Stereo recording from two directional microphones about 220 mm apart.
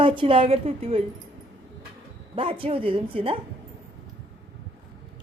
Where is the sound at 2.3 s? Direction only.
25° right (ahead or behind).